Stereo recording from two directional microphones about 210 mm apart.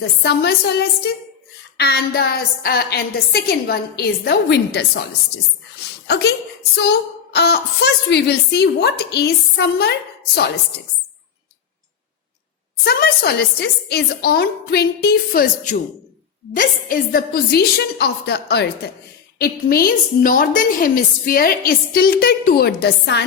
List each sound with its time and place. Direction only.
0.0 s a woman's voice: 50° left (ahead or behind)
6.1 s a woman's voice: 55° left (ahead or behind)
7.3 s a woman's voice: 50° left (ahead or behind)
12.8 s a woman's voice: 50° left (ahead or behind)